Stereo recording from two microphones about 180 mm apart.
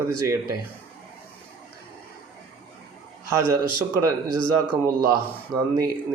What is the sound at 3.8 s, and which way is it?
Speech, 20° right (ahead or behind).